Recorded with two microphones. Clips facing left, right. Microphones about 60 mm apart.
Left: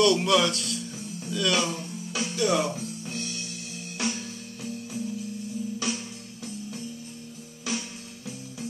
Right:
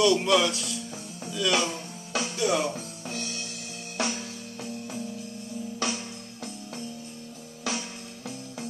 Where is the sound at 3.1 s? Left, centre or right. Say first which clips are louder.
Even; right.